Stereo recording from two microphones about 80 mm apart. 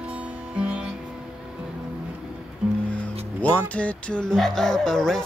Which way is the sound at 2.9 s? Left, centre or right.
Centre.